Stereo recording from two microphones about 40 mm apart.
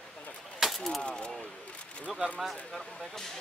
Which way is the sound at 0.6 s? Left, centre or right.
Centre.